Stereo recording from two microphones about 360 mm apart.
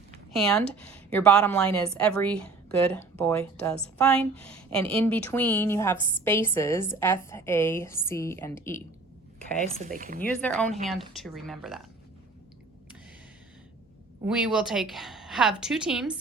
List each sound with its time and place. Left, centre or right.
0.3 s a woman's voice: centre
9.8 s speech: right
10.2 s a woman's voice: centre
14.3 s a woman's voice: centre